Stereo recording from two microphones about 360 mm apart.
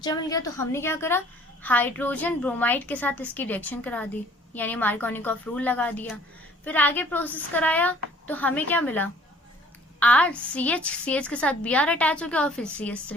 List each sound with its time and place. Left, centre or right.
0.0 s a woman's voice: centre